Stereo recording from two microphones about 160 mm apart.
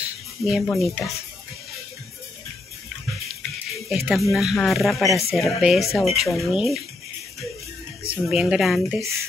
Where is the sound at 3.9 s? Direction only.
Centre (ahead or behind).